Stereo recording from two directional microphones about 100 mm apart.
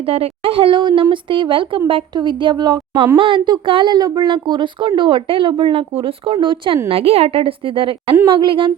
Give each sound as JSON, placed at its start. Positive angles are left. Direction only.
{"t": 0.0, "sound": "a woman's voice", "side_deg": -70}
{"t": 6.8, "sound": "a woman's voice", "side_deg": -75}